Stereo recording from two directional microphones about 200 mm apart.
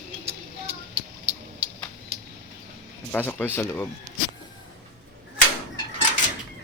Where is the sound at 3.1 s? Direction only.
10° left (ahead or behind).